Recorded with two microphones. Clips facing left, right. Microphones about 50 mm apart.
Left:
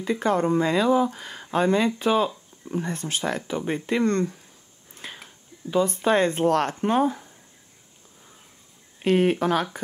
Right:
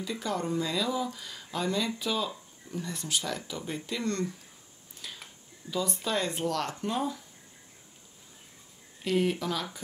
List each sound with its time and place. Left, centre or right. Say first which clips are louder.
0.0 s speech: left 10 dB; left
4.9 s a sound: left 5 dB; left
5.7 s speech: left 10 dB; left
9.0 s speech: left 8 dB; left